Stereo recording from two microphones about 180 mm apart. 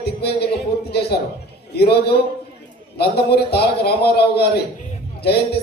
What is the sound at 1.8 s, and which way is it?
A man's voice, 65° left (ahead or behind).